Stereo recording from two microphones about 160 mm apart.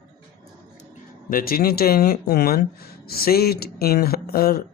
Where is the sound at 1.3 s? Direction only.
65° left (ahead or behind).